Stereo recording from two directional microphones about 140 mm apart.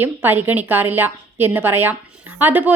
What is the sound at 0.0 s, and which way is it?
A woman's voice, 15° right (ahead or behind).